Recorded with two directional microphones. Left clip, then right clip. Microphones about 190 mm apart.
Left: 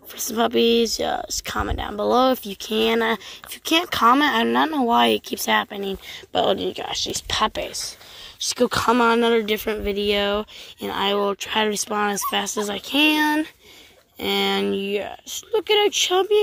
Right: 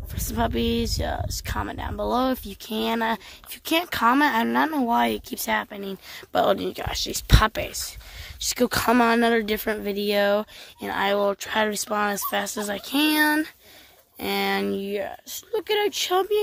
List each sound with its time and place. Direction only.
0.2 s speech: centre (ahead or behind)
6.3 s speech: 15° right (ahead or behind)
10.8 s speech: centre (ahead or behind)